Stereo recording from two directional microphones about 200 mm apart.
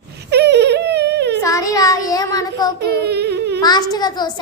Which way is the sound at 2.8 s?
55° right (ahead or behind).